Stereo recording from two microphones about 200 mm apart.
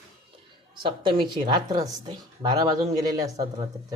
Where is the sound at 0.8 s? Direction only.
25° right (ahead or behind).